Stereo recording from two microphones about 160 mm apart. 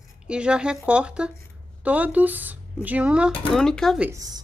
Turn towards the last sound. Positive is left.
turn(degrees=-20)  # may be behind; listen again after turning